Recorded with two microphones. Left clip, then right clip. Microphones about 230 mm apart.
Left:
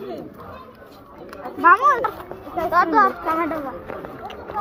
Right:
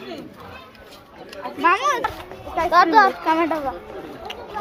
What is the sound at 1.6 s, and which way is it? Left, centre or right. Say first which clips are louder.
Speech: left 4 dB; centre.